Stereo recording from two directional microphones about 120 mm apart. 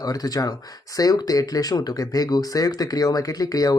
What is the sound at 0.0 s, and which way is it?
Speech, 30° left (ahead or behind).